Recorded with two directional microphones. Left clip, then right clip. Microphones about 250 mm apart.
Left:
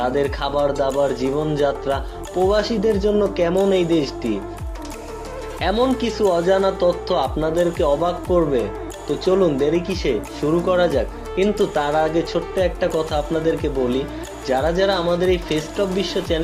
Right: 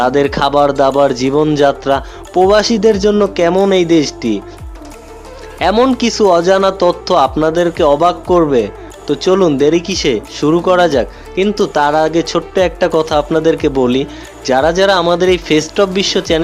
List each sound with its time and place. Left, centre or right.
0.0 s speech: right
5.5 s speech: right